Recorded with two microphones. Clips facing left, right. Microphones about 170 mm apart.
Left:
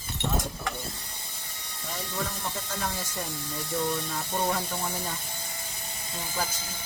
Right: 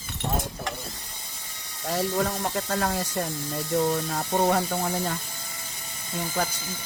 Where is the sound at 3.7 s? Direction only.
55° right (ahead or behind).